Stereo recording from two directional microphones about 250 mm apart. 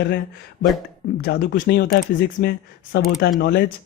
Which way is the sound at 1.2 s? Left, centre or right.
Left.